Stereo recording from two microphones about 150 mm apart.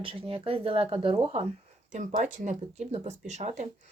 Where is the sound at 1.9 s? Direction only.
55° right (ahead or behind).